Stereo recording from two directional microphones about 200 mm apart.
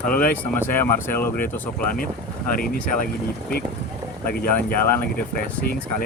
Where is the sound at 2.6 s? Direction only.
45° left (ahead or behind).